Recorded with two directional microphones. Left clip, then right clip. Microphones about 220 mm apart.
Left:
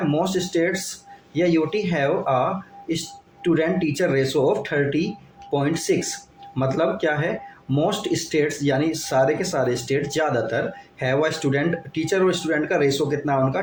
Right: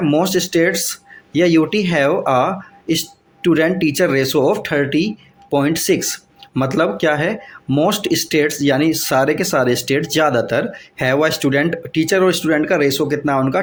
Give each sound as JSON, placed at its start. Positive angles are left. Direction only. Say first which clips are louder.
{"t": 0.1, "sound": "speech", "louder": "right 8 dB", "side_deg": -45}